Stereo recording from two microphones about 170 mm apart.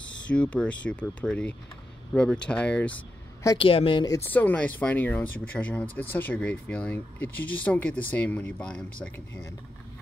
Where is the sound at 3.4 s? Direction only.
30° left (ahead or behind).